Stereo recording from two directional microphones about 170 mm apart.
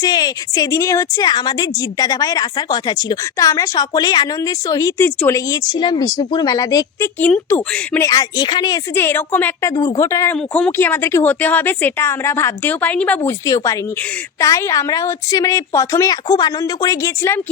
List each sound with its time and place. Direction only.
0.0 s a woman's voice: 25° left (ahead or behind)
7.2 s a woman's voice: 10° left (ahead or behind)